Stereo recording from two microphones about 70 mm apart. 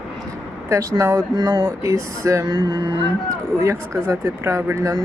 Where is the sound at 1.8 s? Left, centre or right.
Right.